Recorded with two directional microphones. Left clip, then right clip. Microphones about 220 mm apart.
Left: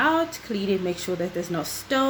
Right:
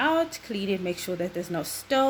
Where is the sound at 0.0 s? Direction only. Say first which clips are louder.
Left 2 dB; 30° right (ahead or behind).